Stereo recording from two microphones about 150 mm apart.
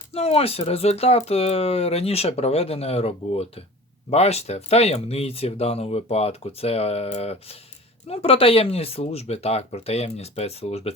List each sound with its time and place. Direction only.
0.1 s speech: 40° left (ahead or behind)